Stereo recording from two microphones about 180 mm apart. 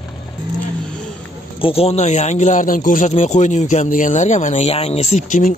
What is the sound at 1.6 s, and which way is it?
Speech, 30° left (ahead or behind).